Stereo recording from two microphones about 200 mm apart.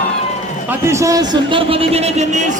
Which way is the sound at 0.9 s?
15° right (ahead or behind).